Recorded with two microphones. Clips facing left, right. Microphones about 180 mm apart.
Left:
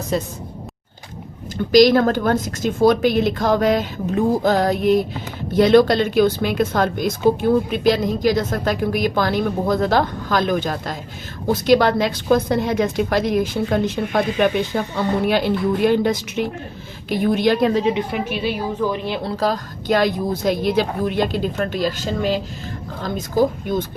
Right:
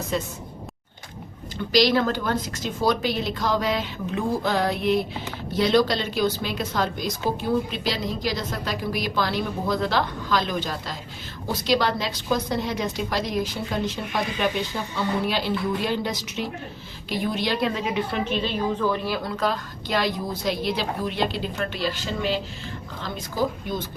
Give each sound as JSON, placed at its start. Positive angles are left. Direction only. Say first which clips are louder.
{"t": 0.1, "sound": "speech", "louder": "left 5 dB", "side_deg": 40}
{"t": 1.7, "sound": "a woman's voice", "louder": "left 8 dB", "side_deg": 45}
{"t": 18.1, "sound": "speech", "louder": "left 3 dB", "side_deg": 10}